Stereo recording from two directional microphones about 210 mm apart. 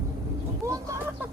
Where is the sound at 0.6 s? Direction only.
15° right (ahead or behind).